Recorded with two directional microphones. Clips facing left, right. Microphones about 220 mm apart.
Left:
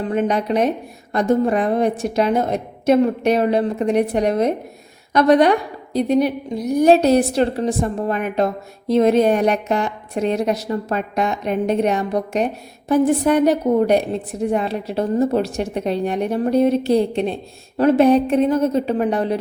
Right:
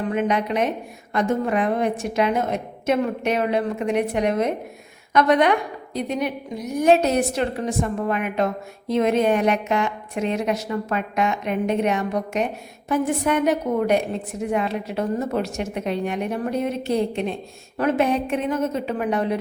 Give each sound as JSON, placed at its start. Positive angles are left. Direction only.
{"t": 0.0, "sound": "a woman's voice", "side_deg": 35}